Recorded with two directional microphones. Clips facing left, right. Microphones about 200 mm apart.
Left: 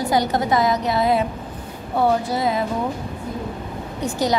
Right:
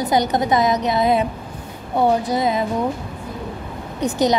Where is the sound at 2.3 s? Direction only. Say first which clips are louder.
Right 2 dB; 20° right (ahead or behind).